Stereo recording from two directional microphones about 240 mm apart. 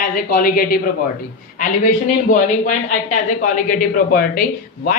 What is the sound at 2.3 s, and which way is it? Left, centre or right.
Speech, left.